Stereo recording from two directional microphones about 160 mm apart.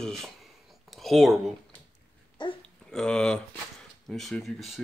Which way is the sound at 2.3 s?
30° left (ahead or behind).